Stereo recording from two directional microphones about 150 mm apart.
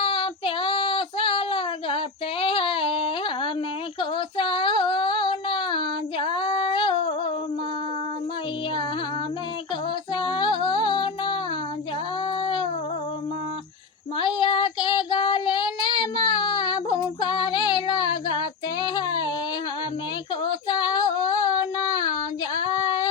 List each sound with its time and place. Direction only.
0.0 s child singing: 35° left (ahead or behind)
2.4 s a sound: 35° left (ahead or behind)
4.4 s child singing: 35° left (ahead or behind)
10.2 s female singing: 30° left (ahead or behind)
12.4 s a sound: 35° left (ahead or behind)
14.2 s child singing: 30° left (ahead or behind)
20.4 s female singing: 30° left (ahead or behind)